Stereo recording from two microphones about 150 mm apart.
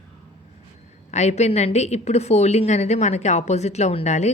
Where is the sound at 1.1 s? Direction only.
50° left (ahead or behind).